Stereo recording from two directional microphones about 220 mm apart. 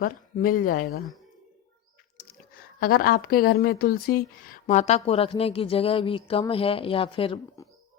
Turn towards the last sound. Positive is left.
turn(degrees=25)  # may be behind; listen again after turning